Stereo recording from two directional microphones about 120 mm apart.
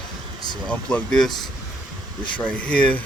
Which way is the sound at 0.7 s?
10° left (ahead or behind).